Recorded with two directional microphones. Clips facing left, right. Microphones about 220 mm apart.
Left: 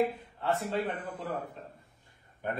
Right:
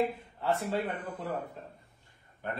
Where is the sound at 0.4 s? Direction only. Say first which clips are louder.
Even; centre (ahead or behind).